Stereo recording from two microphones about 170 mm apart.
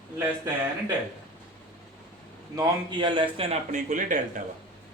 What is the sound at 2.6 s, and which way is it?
A man's voice, 25° right (ahead or behind).